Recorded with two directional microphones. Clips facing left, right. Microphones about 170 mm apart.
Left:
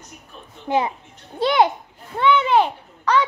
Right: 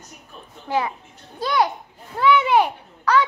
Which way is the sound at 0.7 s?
20° left (ahead or behind).